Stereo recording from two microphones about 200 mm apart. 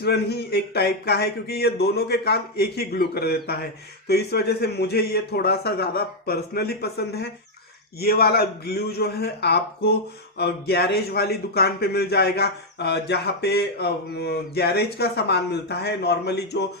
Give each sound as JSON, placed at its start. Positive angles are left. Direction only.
{"t": 0.0, "sound": "speech", "side_deg": 55}